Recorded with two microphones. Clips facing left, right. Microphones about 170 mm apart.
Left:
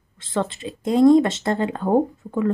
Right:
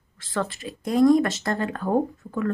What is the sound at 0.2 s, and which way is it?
Speech, 20° left (ahead or behind).